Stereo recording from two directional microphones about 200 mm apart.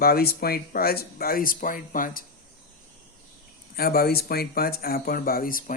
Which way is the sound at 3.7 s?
50° left (ahead or behind).